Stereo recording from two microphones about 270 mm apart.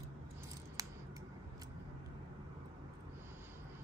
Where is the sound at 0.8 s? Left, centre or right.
Centre.